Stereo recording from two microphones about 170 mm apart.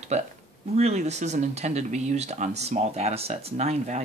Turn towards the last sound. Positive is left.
turn(degrees=-40)  # may be behind; listen again after turning